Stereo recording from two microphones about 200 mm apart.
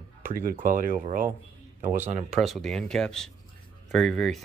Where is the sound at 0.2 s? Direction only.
45° right (ahead or behind).